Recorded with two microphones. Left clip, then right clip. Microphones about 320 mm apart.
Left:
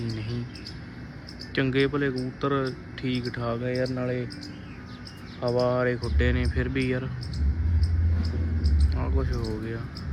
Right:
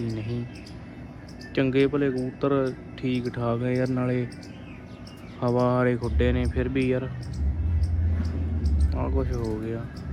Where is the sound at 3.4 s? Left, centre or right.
Right.